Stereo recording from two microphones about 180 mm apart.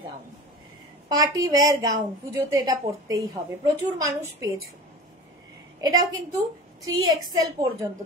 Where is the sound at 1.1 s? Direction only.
20° right (ahead or behind).